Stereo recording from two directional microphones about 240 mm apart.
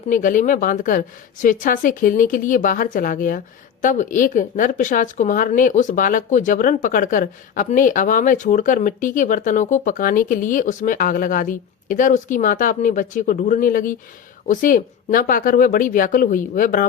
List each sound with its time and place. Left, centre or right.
0.1 s a woman's voice: left